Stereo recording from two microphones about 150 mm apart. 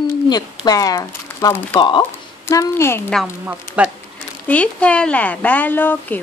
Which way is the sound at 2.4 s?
15° left (ahead or behind).